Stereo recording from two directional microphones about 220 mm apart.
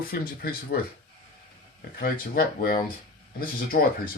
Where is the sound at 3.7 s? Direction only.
40° left (ahead or behind).